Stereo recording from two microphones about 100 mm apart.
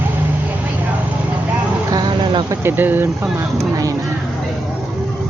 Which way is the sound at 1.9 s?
45° right (ahead or behind).